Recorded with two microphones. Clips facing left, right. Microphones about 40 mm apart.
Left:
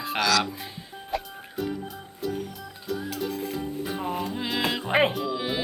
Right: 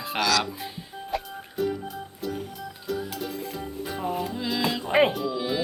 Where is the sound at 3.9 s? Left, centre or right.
Centre.